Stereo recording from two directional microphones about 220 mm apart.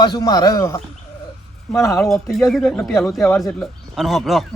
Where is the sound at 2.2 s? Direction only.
Centre (ahead or behind).